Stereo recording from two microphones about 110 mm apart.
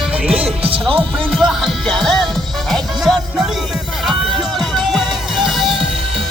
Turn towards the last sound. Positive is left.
turn(degrees=0)  # may be behind; listen again after turning